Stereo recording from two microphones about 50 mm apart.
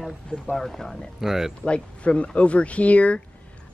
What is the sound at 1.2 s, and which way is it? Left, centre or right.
Speech, centre.